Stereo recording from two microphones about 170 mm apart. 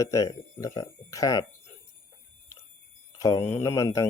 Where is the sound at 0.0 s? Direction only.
20° left (ahead or behind).